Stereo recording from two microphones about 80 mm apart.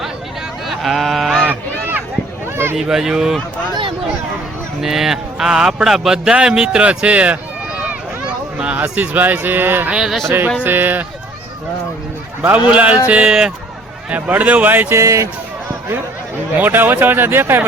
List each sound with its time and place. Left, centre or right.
0.7 s a sound: centre
2.7 s speech: centre
4.8 s speech: centre
8.5 s a sound: centre
8.8 s speech: right
9.9 s speech: centre
10.2 s speech: right
12.5 s speech: centre
14.9 s speech: right
16.6 s speech: right